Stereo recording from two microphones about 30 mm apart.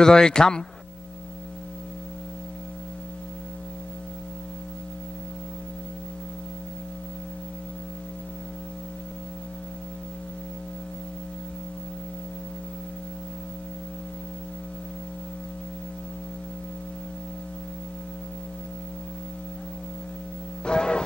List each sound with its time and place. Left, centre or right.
0.0 s speech: left
20.6 s music: left